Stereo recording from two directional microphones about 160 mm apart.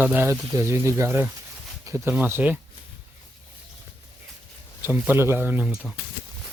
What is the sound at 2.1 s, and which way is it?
Speech, 10° right (ahead or behind).